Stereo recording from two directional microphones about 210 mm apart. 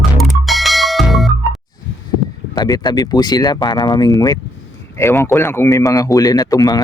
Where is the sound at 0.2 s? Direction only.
Centre (ahead or behind).